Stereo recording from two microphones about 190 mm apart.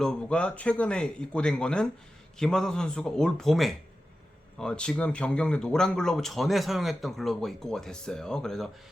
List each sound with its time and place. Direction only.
0.0 s speech: 5° left (ahead or behind)